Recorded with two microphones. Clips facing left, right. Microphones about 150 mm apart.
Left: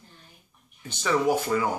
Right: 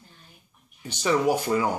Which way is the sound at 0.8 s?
15° right (ahead or behind).